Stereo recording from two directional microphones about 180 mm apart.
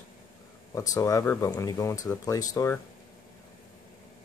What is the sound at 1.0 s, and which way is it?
Speech, 20° left (ahead or behind).